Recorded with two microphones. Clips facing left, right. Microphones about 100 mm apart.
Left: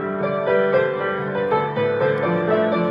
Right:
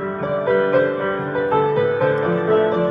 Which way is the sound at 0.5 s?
25° right (ahead or behind).